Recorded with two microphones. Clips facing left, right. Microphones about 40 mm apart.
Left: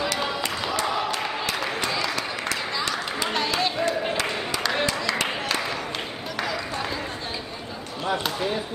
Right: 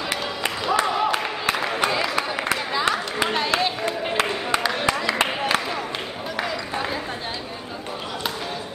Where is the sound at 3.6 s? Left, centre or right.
Centre.